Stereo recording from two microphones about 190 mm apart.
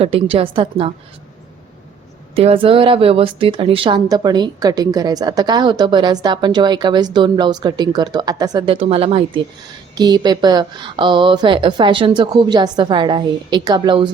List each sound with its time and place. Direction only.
0.0 s speech: 30° right (ahead or behind)
2.3 s speech: 30° right (ahead or behind)